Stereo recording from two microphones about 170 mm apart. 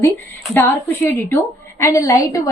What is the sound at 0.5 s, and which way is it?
A woman's voice, 10° left (ahead or behind).